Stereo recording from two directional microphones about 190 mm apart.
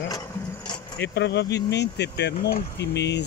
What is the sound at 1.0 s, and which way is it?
Speech, 60° left (ahead or behind).